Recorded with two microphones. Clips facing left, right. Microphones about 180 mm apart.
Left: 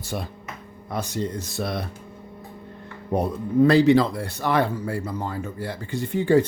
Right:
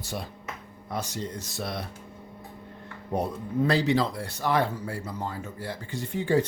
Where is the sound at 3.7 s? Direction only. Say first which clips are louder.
Left 7 dB; 60° left (ahead or behind).